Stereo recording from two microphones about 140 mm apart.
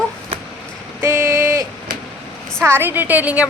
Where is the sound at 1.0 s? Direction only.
20° right (ahead or behind).